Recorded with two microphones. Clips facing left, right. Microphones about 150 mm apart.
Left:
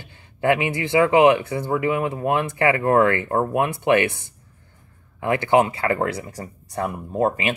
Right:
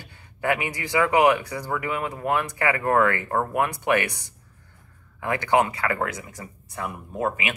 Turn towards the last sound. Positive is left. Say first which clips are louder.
# left 6 dB
turn(degrees=35)  # may be behind; listen again after turning